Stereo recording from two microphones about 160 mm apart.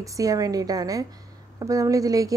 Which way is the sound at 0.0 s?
20° right (ahead or behind).